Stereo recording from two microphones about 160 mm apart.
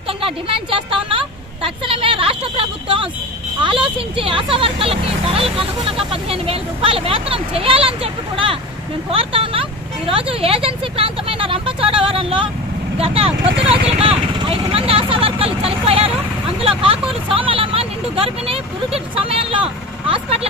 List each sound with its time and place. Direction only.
0.2 s a sound: 35° right (ahead or behind)
3.6 s speech: 35° right (ahead or behind)
12.9 s vehicle: 35° right (ahead or behind)
16.6 s speech: 35° right (ahead or behind)